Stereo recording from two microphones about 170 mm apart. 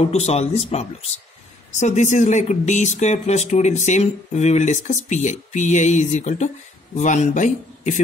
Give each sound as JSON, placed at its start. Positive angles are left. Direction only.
{"t": 0.0, "sound": "speech", "side_deg": 40}